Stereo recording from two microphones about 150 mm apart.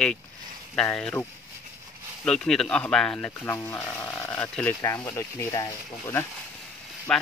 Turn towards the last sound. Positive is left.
turn(degrees=5)  # may be behind; listen again after turning